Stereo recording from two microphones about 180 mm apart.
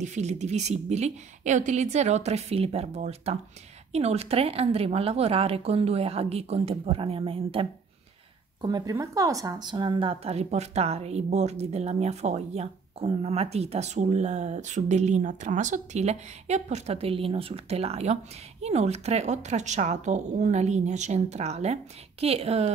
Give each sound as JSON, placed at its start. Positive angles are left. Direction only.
{"t": 0.0, "sound": "speech", "side_deg": -40}